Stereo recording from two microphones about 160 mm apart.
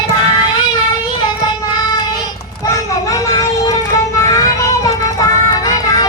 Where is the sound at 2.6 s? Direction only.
20° left (ahead or behind).